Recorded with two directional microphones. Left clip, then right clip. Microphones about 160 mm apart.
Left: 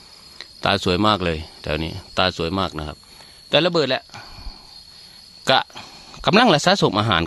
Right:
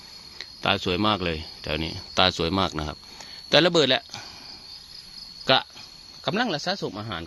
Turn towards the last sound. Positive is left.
turn(degrees=75)  # may be behind; listen again after turning